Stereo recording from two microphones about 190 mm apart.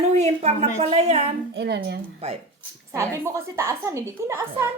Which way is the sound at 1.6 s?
60° right (ahead or behind).